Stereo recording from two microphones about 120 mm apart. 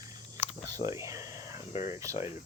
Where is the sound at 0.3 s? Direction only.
15° left (ahead or behind).